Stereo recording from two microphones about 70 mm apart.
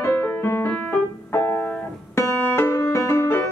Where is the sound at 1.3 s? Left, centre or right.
Left.